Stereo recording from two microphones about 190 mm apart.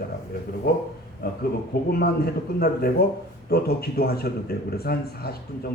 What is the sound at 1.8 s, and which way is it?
A man's voice, 55° left (ahead or behind).